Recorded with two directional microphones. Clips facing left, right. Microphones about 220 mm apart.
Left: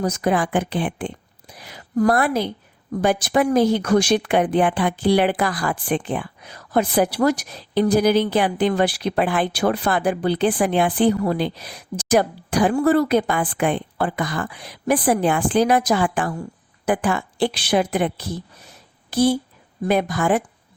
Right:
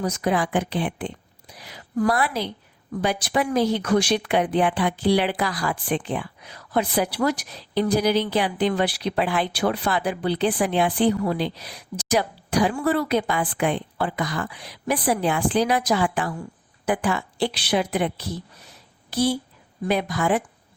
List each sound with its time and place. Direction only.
0.0 s a woman's voice: 45° left (ahead or behind)